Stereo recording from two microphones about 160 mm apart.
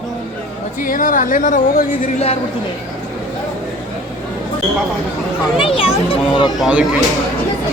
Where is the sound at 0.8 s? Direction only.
60° left (ahead or behind).